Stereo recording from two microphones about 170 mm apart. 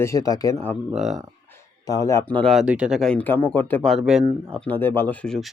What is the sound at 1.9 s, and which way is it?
Speech, 20° left (ahead or behind).